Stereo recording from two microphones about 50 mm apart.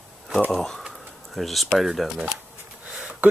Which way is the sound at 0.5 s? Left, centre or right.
Centre.